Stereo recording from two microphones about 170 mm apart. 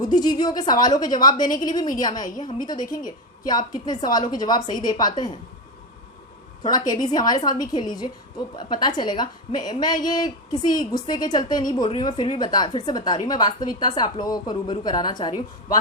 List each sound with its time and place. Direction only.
0.0 s a woman's voice: 25° left (ahead or behind)
6.6 s a woman's voice: 25° left (ahead or behind)